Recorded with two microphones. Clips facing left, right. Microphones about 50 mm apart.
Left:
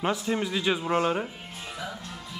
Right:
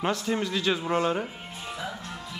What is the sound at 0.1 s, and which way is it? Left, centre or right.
Speech, centre.